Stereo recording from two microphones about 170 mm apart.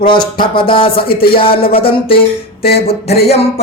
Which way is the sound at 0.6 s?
30° left (ahead or behind).